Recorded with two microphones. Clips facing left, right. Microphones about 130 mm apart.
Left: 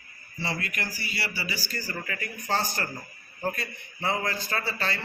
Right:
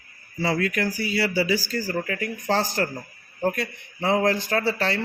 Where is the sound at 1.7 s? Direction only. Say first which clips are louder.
Right 9 dB; 90° right.